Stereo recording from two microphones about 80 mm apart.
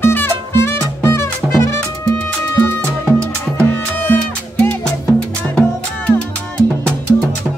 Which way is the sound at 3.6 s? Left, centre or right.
Left.